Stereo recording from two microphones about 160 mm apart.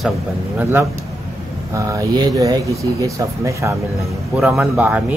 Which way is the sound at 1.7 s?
20° right (ahead or behind).